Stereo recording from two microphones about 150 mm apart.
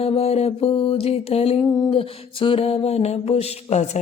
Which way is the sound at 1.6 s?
25° left (ahead or behind).